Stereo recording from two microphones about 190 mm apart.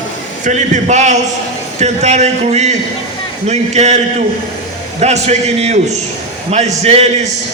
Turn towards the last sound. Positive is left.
turn(degrees=-35)  # may be behind; listen again after turning